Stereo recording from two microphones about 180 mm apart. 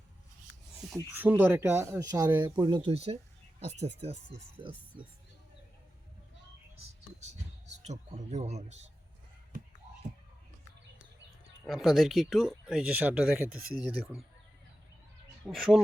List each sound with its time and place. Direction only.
0.9 s speech: 15° right (ahead or behind)
2.6 s speech: 30° right (ahead or behind)
7.8 s speech: 40° right (ahead or behind)
11.6 s speech: centre (ahead or behind)
15.4 s speech: centre (ahead or behind)